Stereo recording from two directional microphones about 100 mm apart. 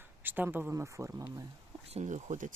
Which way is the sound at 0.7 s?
30° right (ahead or behind).